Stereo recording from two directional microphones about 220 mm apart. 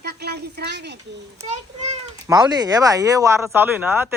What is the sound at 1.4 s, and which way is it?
Speech, 30° right (ahead or behind).